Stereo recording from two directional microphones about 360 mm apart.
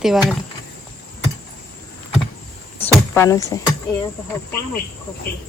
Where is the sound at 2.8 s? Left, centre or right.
Centre.